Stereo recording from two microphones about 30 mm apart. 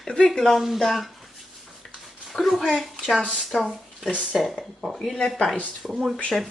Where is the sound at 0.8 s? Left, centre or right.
Centre.